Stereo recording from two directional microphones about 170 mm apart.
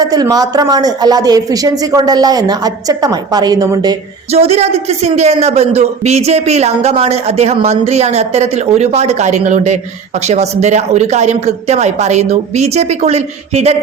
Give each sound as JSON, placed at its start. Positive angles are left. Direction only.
{"t": 0.0, "sound": "speech", "side_deg": -20}
{"t": 4.3, "sound": "a man's voice", "side_deg": -35}